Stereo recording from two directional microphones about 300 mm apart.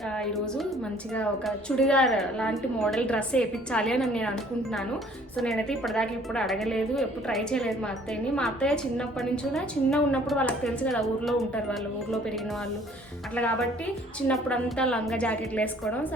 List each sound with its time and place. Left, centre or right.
0.2 s a woman's voice: centre
5.4 s a woman's voice: centre
13.3 s a woman's voice: centre